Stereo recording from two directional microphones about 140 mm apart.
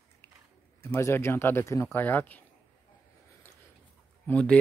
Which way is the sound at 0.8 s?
15° left (ahead or behind).